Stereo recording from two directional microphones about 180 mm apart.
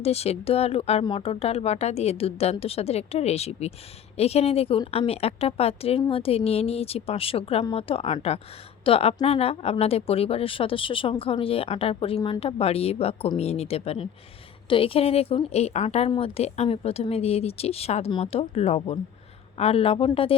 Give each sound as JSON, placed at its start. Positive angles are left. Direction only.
{"t": 0.0, "sound": "a woman's voice", "side_deg": 35}